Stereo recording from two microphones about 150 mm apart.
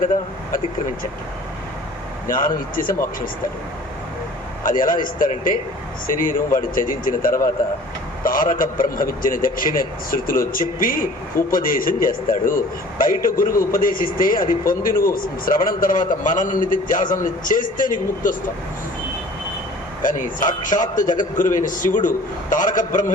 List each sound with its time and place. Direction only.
2.2 s a man's voice: 65° left (ahead or behind)
4.6 s a man's voice: 65° left (ahead or behind)
20.0 s a man's voice: 60° left (ahead or behind)